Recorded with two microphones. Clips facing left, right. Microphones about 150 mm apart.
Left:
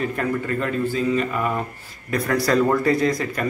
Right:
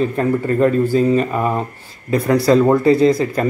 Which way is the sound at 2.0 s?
25° right (ahead or behind).